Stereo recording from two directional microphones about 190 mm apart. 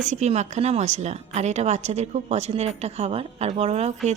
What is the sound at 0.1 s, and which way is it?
A woman's voice, 35° right (ahead or behind).